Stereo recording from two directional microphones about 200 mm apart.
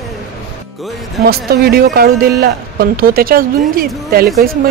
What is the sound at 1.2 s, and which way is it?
Speech, 50° right (ahead or behind).